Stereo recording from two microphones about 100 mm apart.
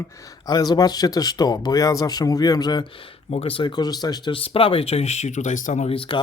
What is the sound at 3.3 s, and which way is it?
Speech, 80° left.